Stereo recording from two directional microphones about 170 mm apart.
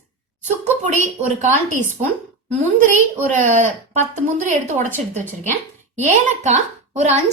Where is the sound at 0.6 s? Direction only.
45° right (ahead or behind).